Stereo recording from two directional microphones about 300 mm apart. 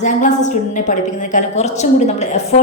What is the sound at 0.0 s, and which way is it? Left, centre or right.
A woman's voice, left.